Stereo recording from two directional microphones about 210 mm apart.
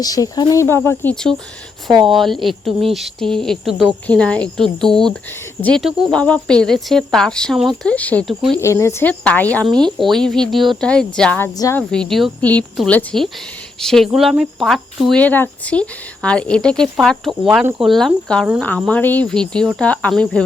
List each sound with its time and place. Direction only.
0.0 s speech: 15° left (ahead or behind)
1.9 s speech: 25° right (ahead or behind)
2.1 s speech: centre (ahead or behind)
8.6 s speech: 15° left (ahead or behind)
11.8 s speech: 5° left (ahead or behind)